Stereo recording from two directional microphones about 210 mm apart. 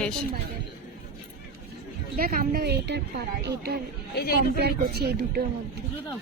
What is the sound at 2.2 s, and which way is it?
Speech, 45° right (ahead or behind).